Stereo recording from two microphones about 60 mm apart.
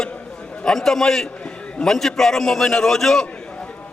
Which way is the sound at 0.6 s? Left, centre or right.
Centre.